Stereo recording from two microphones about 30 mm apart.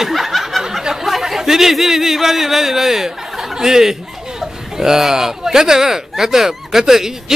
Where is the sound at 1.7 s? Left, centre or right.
Centre.